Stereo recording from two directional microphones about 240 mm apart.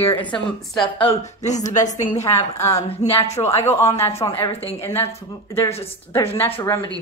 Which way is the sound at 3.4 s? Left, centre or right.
Centre.